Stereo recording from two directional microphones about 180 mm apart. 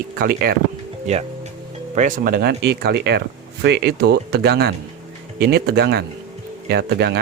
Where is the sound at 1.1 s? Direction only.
40° right (ahead or behind).